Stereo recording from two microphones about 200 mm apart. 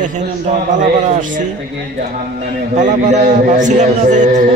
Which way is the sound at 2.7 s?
35° right (ahead or behind).